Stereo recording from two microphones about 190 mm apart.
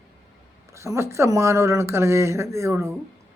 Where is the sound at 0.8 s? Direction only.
15° right (ahead or behind).